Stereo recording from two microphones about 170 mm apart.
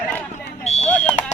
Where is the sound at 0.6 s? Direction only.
40° left (ahead or behind).